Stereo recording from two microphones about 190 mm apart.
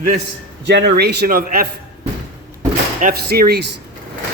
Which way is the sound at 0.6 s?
65° right (ahead or behind).